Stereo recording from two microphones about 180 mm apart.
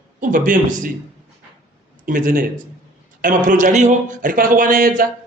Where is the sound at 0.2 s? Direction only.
45° right (ahead or behind).